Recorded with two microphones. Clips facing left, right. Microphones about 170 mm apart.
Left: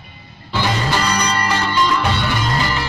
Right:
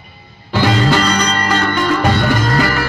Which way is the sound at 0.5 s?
55° right (ahead or behind).